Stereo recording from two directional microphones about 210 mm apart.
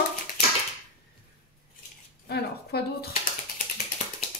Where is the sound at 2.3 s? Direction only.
50° left (ahead or behind).